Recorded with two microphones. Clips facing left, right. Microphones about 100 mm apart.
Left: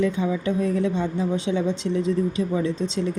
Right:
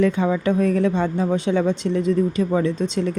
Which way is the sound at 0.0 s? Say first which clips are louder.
Right 4 dB; 60° right (ahead or behind).